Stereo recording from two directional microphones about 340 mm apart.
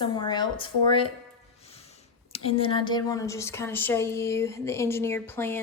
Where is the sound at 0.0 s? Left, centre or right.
Centre.